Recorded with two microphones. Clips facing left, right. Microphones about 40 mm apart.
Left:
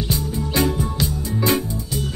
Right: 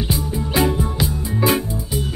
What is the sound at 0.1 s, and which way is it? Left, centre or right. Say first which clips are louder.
Music: right 1 dB; centre.